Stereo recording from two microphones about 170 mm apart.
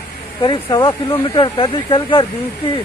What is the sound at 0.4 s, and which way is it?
Speech, 30° left (ahead or behind).